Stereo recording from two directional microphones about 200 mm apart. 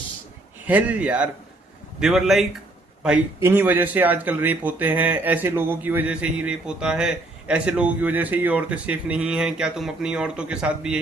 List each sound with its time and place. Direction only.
0.7 s a man's voice: 5° right (ahead or behind)